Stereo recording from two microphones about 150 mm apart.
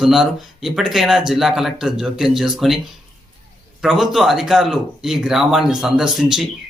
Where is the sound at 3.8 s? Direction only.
Centre (ahead or behind).